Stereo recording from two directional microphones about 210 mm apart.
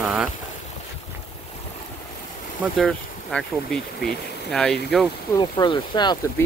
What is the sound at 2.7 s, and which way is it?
Speech, 5° left (ahead or behind).